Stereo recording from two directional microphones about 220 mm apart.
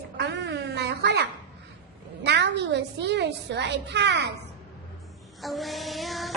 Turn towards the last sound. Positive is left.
turn(degrees=0)  # may be behind; listen again after turning